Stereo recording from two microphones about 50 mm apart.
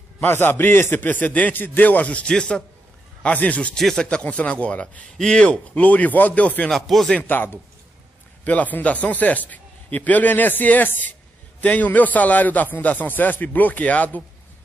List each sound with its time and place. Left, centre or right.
0.2 s a man's voice: left
1.0 s speech: left; by 2.6 s centre
3.3 s speech: left
3.7 s speech: centre
4.2 s speech: left
5.5 s speech: left
6.7 s speech: centre
7.2 s a man's voice: left
8.5 s speech: left